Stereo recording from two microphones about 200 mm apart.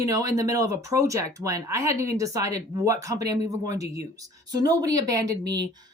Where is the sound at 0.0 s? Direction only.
15° right (ahead or behind).